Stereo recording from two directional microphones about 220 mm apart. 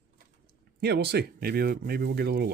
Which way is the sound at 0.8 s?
50° right (ahead or behind).